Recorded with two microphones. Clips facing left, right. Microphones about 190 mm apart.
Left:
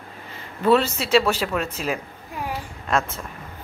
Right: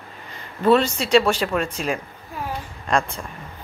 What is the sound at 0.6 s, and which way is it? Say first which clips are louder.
Speech: right 1 dB; 5° left (ahead or behind).